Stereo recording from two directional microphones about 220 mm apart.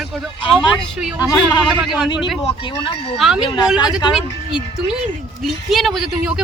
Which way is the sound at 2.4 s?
25° left (ahead or behind).